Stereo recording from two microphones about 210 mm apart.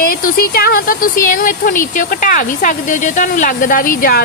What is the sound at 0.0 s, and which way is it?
Speech, 40° left (ahead or behind).